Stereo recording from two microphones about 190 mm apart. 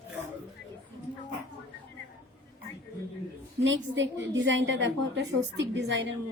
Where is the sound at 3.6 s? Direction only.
80° right.